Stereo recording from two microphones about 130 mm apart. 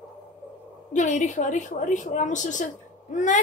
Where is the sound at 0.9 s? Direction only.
70° left (ahead or behind).